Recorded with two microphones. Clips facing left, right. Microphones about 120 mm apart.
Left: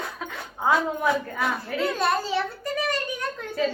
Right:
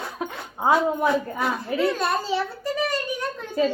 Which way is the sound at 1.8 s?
Centre (ahead or behind).